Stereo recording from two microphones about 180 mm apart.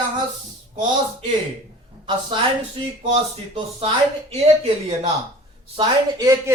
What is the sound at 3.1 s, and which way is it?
A man's voice, 30° right (ahead or behind).